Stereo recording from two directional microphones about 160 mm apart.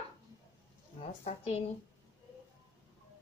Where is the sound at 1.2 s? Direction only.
40° left (ahead or behind).